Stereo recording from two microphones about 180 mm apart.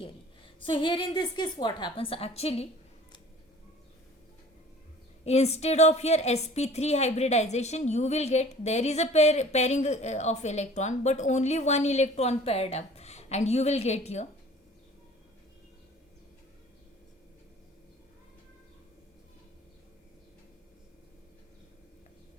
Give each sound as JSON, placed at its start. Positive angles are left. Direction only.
{"t": 0.6, "sound": "a woman's voice", "side_deg": 25}
{"t": 5.2, "sound": "a woman's voice", "side_deg": 35}